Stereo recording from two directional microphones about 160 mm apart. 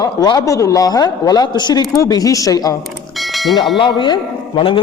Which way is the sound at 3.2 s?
Centre (ahead or behind).